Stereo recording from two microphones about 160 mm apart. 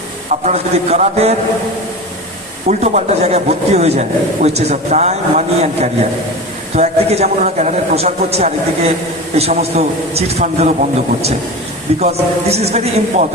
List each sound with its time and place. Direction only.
0.3 s a man's voice: 45° right (ahead or behind)
2.6 s a man's voice: 45° right (ahead or behind)
11.9 s a man's voice: 40° right (ahead or behind)